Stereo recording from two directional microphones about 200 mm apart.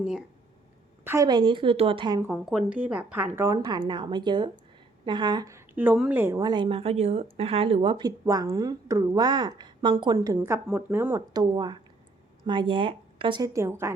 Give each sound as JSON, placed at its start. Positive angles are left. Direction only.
{"t": 1.0, "sound": "a woman's voice", "side_deg": -15}
{"t": 2.2, "sound": "a woman's voice", "side_deg": -5}